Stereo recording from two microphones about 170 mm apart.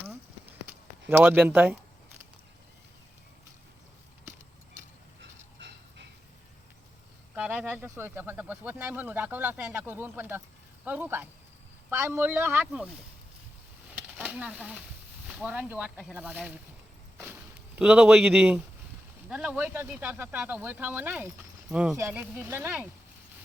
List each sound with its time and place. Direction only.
1.0 s speech: 10° right (ahead or behind)
7.3 s pigeon: 10° right (ahead or behind)
10.8 s a sound: 10° right (ahead or behind)
11.9 s speech: 15° right (ahead or behind)
14.1 s speech: 5° right (ahead or behind)
17.7 s speech: 5° right (ahead or behind)